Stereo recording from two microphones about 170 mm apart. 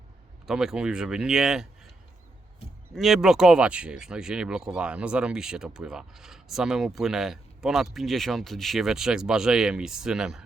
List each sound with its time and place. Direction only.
0.4 s speech: 5° right (ahead or behind)
2.9 s speech: centre (ahead or behind)